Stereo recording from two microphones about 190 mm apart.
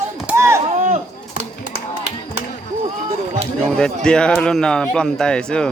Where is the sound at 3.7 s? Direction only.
5° left (ahead or behind).